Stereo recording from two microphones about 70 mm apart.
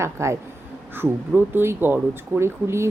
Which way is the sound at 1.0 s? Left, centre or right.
Right.